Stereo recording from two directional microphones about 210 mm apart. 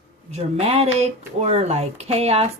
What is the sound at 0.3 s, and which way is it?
Speech, 30° right (ahead or behind).